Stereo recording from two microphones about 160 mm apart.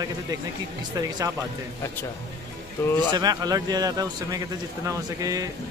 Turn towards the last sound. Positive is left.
turn(degrees=-20)  # may be behind; listen again after turning